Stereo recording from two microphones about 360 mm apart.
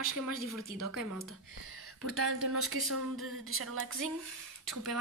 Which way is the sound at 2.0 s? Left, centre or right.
Right.